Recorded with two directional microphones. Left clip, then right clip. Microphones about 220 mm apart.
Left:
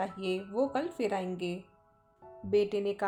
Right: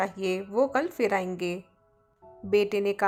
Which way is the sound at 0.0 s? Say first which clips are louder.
Right 5 dB; 20° right (ahead or behind).